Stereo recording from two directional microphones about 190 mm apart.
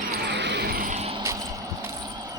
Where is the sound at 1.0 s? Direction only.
30° right (ahead or behind).